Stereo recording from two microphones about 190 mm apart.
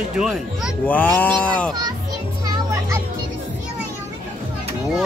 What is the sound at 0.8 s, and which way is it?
Speech, 10° left (ahead or behind).